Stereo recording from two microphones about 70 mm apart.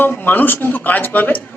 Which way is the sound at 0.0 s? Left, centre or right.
Left.